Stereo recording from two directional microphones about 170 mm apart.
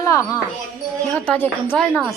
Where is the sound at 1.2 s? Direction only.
10° left (ahead or behind).